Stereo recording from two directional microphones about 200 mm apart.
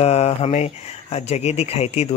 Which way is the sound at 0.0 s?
30° left (ahead or behind).